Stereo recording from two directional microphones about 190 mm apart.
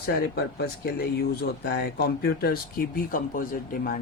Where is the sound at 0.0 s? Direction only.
55° left (ahead or behind).